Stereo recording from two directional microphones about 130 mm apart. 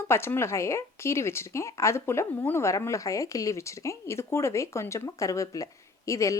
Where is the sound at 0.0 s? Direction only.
15° left (ahead or behind).